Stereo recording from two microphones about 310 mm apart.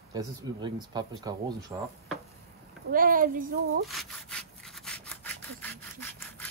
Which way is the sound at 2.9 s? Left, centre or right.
Right.